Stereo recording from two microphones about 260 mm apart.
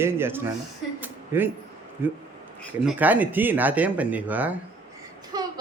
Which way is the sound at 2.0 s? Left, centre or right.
Centre.